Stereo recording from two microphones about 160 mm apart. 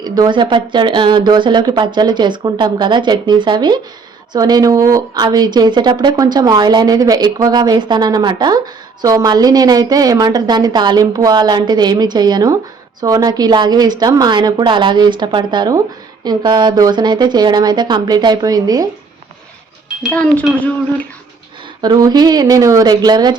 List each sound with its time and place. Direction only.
0.0 s speech: 25° right (ahead or behind)
20.0 s speech: 5° left (ahead or behind)
21.8 s speech: 25° right (ahead or behind)